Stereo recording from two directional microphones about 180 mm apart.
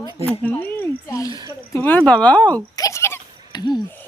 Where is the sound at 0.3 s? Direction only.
10° left (ahead or behind).